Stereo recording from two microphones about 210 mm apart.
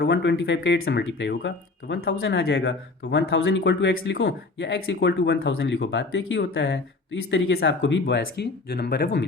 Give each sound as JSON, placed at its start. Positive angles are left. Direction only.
{"t": 0.0, "sound": "speech", "side_deg": 55}